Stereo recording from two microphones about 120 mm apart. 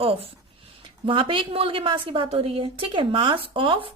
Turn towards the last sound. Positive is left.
turn(degrees=-45)  # may be behind; listen again after turning